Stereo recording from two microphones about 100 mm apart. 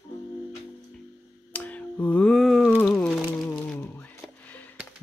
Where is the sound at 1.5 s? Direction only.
15° left (ahead or behind).